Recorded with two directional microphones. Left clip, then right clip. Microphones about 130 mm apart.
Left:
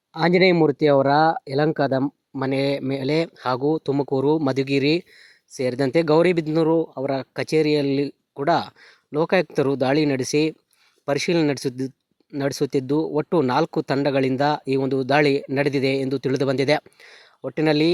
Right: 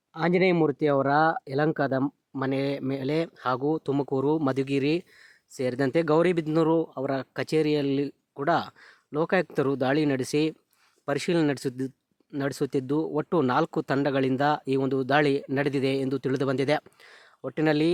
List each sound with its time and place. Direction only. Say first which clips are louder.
0.1 s speech: left 6 dB; 30° left (ahead or behind)